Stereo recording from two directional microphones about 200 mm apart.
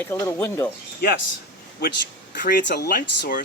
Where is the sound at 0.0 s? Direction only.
10° left (ahead or behind).